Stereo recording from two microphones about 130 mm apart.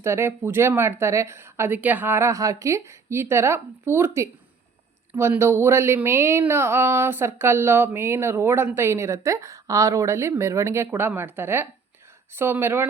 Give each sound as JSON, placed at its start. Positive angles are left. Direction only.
{"t": 0.0, "sound": "speech", "side_deg": -20}